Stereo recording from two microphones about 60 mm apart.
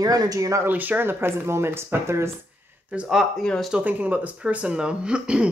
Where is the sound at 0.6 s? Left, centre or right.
Right.